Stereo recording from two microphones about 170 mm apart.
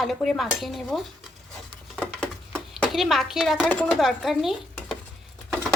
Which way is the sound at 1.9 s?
5° left (ahead or behind).